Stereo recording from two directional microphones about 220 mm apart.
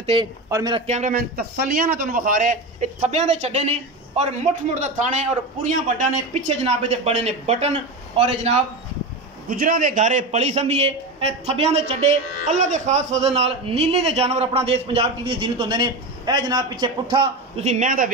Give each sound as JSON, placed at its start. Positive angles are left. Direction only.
{"t": 0.0, "sound": "a man's voice", "side_deg": -20}